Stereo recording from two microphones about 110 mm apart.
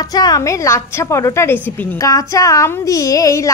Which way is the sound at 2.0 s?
30° left (ahead or behind).